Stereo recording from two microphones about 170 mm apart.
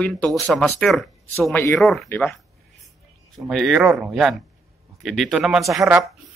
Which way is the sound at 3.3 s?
Centre (ahead or behind).